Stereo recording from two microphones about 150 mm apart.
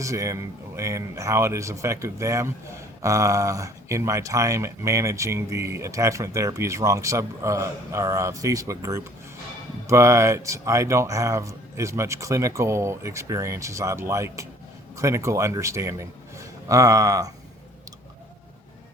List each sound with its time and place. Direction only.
0.0 s a man's voice: 20° right (ahead or behind)